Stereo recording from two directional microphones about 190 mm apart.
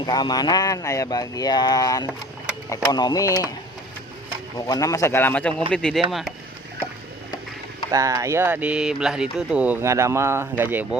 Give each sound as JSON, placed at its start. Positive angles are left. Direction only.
{"t": 0.0, "sound": "speech", "side_deg": 20}
{"t": 4.5, "sound": "speech", "side_deg": 20}
{"t": 7.9, "sound": "speech", "side_deg": -15}